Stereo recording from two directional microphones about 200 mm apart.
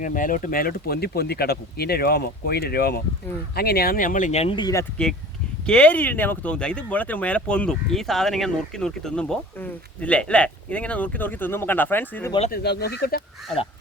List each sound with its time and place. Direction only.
0.0 s speech: 40° left (ahead or behind); by 4.9 s 20° left (ahead or behind)
5.6 s speech: 5° left (ahead or behind)
12.5 s speech: 55° left (ahead or behind)